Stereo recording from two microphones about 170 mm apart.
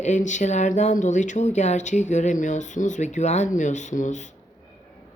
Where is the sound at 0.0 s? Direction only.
45° left (ahead or behind).